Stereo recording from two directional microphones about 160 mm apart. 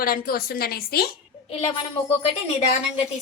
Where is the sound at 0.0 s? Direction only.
70° left (ahead or behind).